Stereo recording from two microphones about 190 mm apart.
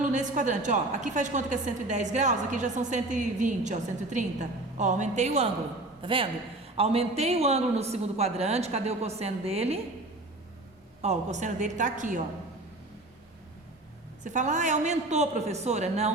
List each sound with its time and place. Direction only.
0.0 s a woman's voice: 40° right (ahead or behind)
11.0 s a woman's voice: 35° right (ahead or behind)
14.3 s a woman's voice: 40° right (ahead or behind)